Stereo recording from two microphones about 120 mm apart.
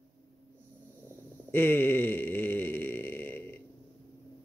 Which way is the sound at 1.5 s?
20° left (ahead or behind).